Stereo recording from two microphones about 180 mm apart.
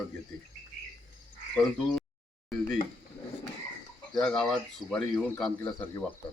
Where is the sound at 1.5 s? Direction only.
Centre (ahead or behind).